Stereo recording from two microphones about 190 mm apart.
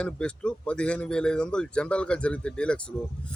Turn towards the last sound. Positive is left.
turn(degrees=5)  # may be behind; listen again after turning